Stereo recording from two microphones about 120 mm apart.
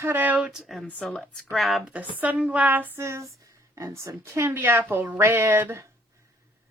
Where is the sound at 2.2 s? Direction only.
10° right (ahead or behind).